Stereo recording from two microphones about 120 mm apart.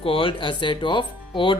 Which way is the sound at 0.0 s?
50° left (ahead or behind).